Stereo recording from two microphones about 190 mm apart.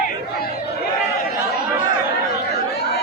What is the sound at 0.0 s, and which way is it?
Crowd, 55° left (ahead or behind).